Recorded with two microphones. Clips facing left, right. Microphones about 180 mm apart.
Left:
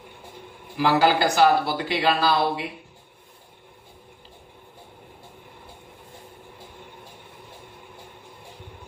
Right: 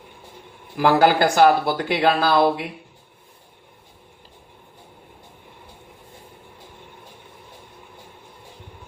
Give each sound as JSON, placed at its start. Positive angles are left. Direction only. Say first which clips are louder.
{"t": 0.8, "sound": "speech", "louder": "right 3 dB", "side_deg": -50}